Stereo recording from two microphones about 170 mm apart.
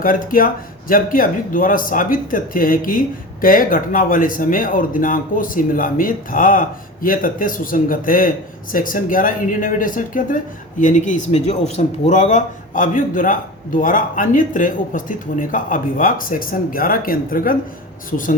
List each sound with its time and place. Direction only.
0.0 s speech: 55° left (ahead or behind)